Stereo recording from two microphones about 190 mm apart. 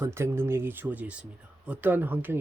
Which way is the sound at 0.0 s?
15° right (ahead or behind).